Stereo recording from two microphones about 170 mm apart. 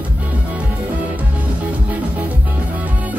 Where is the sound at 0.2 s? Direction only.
10° right (ahead or behind).